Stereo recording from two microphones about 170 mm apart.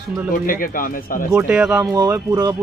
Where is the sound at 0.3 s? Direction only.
55° left (ahead or behind).